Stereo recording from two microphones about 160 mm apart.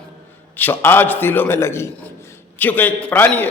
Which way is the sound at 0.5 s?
15° left (ahead or behind).